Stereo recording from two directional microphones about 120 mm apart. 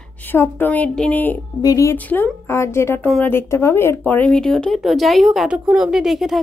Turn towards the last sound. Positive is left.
turn(degrees=0)  # may be behind; listen again after turning